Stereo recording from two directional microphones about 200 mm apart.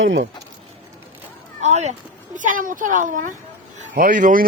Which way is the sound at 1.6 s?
35° right (ahead or behind).